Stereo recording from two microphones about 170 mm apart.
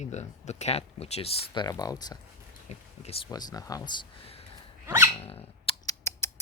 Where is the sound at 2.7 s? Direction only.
40° left (ahead or behind).